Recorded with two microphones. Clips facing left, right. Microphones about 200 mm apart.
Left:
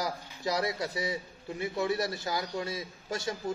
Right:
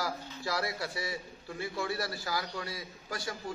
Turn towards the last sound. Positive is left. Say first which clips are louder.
# left 4 dB
turn(degrees=25)  # may be behind; listen again after turning